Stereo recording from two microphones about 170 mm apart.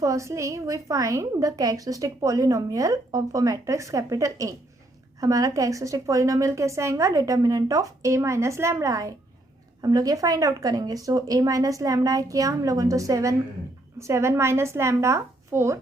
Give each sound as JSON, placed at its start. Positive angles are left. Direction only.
{"t": 0.0, "sound": "a woman's voice", "side_deg": -20}